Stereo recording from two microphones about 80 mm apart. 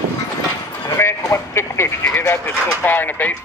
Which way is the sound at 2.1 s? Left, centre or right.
Left.